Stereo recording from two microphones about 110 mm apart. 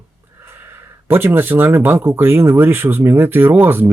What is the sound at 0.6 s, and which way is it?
Speech, 20° right (ahead or behind).